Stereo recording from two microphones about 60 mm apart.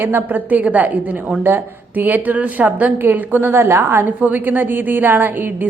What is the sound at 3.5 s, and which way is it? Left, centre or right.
Speech, right.